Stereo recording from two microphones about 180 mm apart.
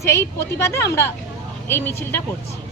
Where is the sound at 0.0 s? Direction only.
15° left (ahead or behind).